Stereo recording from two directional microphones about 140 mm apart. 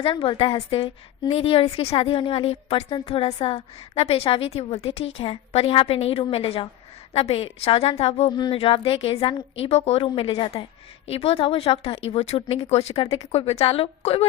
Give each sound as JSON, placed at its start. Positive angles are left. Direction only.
{"t": 0.0, "sound": "a woman's voice", "side_deg": 40}